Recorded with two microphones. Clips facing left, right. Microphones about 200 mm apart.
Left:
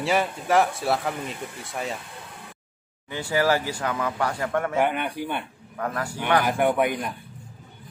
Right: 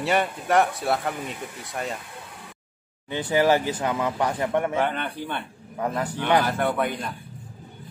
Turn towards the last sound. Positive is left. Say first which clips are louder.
# left 3 dB
turn(degrees=15)  # may be behind; listen again after turning